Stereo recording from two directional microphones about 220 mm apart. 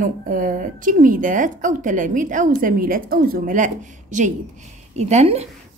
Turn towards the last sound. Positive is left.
turn(degrees=-30)  # may be behind; listen again after turning